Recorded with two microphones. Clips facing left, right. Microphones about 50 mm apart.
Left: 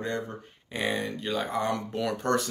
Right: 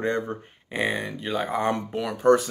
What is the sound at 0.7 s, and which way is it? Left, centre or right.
Speech, centre.